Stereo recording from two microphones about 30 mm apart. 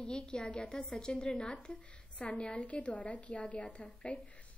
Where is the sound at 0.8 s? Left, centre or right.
Left.